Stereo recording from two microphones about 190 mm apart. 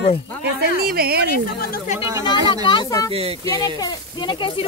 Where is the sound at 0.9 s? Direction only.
55° right (ahead or behind).